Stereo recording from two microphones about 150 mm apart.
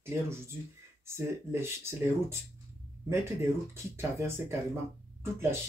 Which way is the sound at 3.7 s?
15° right (ahead or behind).